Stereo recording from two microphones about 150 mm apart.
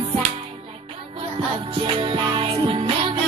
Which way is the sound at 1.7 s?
35° right (ahead or behind).